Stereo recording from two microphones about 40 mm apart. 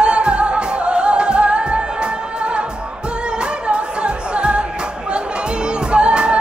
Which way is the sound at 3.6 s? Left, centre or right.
Right.